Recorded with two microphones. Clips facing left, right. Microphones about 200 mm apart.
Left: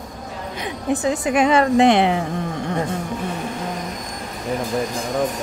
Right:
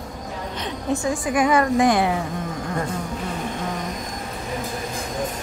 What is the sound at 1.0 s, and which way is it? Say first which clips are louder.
A woman's voice: left 3 dB; 20° left (ahead or behind).